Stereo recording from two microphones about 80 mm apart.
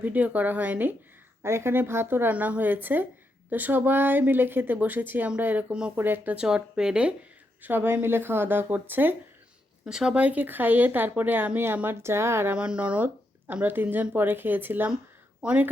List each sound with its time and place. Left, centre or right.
0.0 s speech: centre
1.4 s speech: right
6.3 s speech: centre
7.6 s speech: right
9.8 s speech: centre; by 12.5 s right
12.5 s speech: centre
15.4 s speech: centre